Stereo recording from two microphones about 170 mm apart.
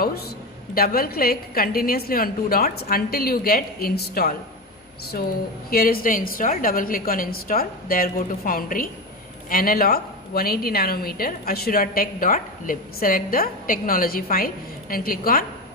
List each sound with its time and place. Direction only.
0.7 s a woman's voice: 60° left (ahead or behind)
5.7 s a woman's voice: 60° left (ahead or behind)